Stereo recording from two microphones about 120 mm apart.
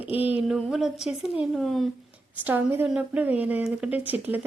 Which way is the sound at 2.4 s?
15° right (ahead or behind).